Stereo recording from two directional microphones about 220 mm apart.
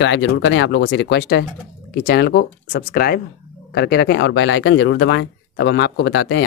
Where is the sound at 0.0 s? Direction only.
55° left (ahead or behind).